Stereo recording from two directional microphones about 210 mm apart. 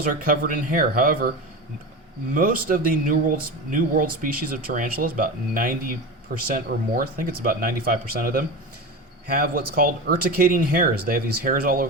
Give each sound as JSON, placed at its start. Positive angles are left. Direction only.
{"t": 0.0, "sound": "speech", "side_deg": -40}
{"t": 2.3, "sound": "speech", "side_deg": -40}